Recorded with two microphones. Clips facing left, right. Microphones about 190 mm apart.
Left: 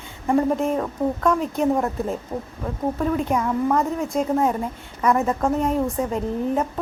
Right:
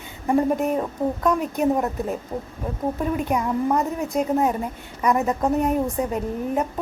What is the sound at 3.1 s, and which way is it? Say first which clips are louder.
Speech: left 1 dB; 15° right (ahead or behind).